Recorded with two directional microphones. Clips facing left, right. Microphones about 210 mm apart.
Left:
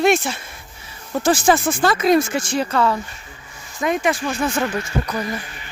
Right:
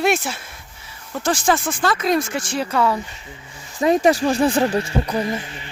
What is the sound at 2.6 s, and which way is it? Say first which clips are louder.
Speech: even; 10° right (ahead or behind).